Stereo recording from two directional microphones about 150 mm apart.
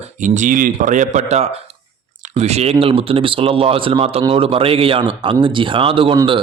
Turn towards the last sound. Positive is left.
turn(degrees=-35)  # may be behind; listen again after turning